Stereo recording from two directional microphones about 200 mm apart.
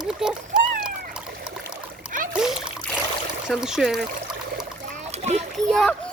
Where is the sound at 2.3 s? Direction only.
5° right (ahead or behind).